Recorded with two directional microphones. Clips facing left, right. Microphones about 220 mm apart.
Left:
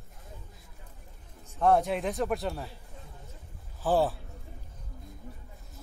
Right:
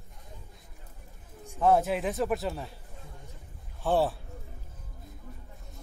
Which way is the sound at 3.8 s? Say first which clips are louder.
Even; centre (ahead or behind).